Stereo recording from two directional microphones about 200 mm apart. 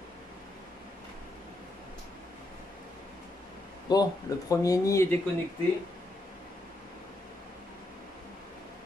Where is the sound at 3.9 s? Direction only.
20° left (ahead or behind).